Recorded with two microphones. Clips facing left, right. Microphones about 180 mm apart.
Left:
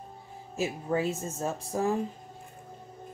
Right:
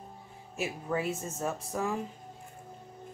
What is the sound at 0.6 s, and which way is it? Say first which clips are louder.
Speech: left 4 dB; 30° left (ahead or behind).